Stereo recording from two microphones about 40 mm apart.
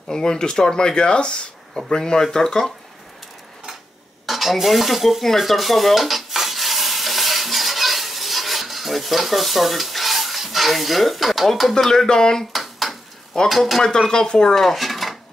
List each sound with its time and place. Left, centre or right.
0.1 s speech: centre
4.3 s stir: centre
11.8 s speech: centre
12.1 s speech: centre
12.5 s a sound: centre
13.5 s speech: centre
13.8 s speech: centre
14.5 s dishes: centre